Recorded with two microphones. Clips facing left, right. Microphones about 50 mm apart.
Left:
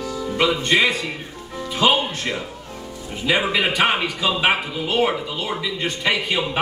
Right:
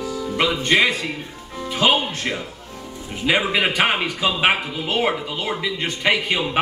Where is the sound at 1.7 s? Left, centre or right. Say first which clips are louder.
Even; right.